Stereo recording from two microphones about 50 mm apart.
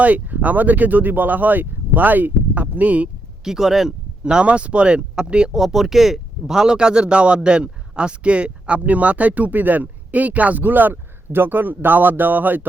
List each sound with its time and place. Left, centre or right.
0.0 s speech: right
3.4 s speech: centre
4.2 s speech: centre
5.5 s speech: centre; by 12.6 s right